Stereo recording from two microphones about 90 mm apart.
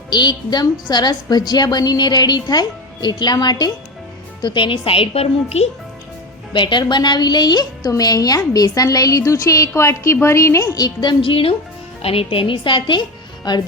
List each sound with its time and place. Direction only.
0.1 s a woman's voice: 55° left (ahead or behind)
4.4 s a woman's voice: 65° left (ahead or behind); by 5.3 s 90° left
6.5 s a woman's voice: 60° left (ahead or behind)
11.2 s a woman's voice: 85° left; by 13.6 s 55° left (ahead or behind)